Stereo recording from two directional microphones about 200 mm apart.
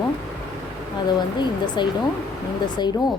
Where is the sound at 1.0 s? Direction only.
20° left (ahead or behind).